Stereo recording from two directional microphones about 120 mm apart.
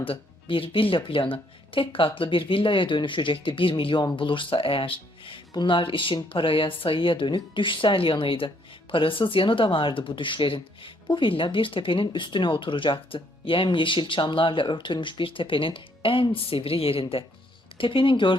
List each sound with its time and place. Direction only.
0.0 s speech: 50° left (ahead or behind)